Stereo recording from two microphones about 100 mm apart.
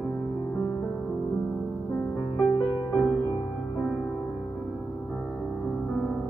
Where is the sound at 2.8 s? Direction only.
20° left (ahead or behind).